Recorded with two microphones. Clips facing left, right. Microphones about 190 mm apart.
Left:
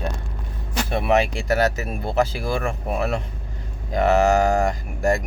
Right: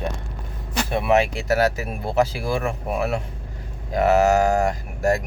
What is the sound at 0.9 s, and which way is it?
Speech, 5° right (ahead or behind).